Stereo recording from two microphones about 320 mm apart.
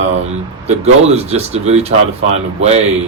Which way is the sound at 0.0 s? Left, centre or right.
Right.